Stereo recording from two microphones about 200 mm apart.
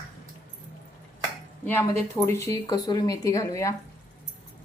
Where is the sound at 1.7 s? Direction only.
10° left (ahead or behind).